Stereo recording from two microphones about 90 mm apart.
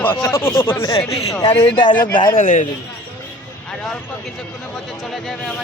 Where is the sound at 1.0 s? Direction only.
90° left.